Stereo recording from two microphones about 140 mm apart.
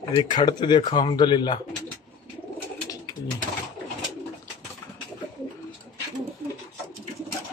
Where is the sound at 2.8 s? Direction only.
25° left (ahead or behind).